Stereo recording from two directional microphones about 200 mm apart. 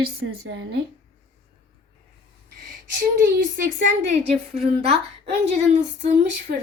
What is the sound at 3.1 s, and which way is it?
A woman's voice, 45° right (ahead or behind).